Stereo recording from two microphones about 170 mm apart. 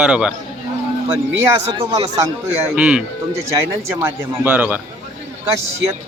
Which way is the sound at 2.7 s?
5° right (ahead or behind).